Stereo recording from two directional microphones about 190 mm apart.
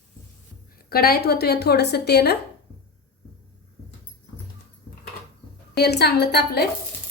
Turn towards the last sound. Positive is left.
turn(degrees=55)  # may be behind; listen again after turning